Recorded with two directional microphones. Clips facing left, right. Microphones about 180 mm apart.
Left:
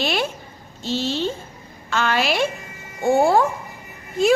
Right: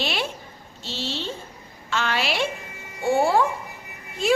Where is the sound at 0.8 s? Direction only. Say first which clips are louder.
Left 8 dB; 45° left (ahead or behind).